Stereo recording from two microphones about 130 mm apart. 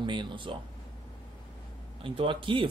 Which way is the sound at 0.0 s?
35° right (ahead or behind).